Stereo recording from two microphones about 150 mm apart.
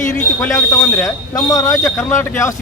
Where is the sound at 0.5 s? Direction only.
10° left (ahead or behind).